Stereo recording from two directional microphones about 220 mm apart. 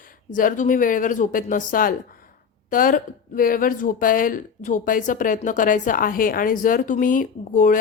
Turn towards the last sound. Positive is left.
turn(degrees=35)  # may be behind; listen again after turning